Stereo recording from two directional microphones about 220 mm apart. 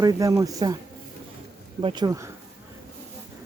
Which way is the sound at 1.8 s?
20° right (ahead or behind).